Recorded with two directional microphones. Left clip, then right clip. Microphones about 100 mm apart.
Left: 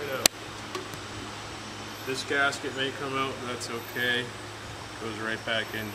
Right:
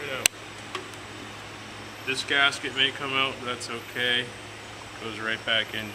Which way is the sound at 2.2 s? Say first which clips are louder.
Right 3 dB; 20° right (ahead or behind).